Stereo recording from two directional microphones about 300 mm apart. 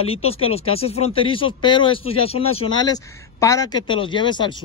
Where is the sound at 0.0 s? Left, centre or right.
Centre.